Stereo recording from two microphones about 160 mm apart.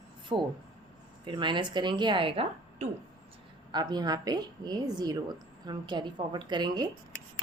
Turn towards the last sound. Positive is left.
turn(degrees=-25)  # may be behind; listen again after turning